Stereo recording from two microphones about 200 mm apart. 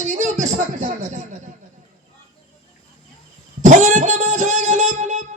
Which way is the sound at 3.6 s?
35° right (ahead or behind).